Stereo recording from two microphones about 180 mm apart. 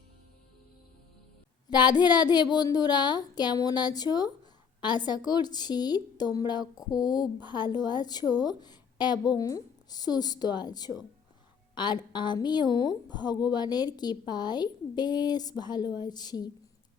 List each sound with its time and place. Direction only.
1.7 s a woman's voice: 25° left (ahead or behind)